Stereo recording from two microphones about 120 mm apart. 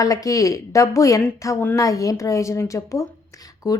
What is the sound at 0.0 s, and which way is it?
A woman's voice, 30° left (ahead or behind).